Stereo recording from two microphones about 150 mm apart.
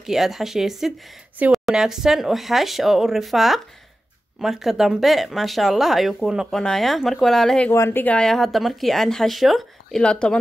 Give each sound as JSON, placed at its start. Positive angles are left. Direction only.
{"t": 0.0, "sound": "speech", "side_deg": 0}
{"t": 7.7, "sound": "speech", "side_deg": 15}